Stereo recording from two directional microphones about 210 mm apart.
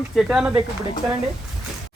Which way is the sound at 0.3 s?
5° right (ahead or behind).